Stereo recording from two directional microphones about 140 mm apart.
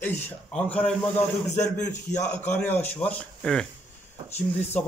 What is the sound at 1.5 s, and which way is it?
Speech, 60° left (ahead or behind).